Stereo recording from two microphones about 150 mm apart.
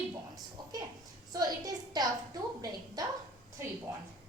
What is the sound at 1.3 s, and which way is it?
A child's voice, 25° right (ahead or behind).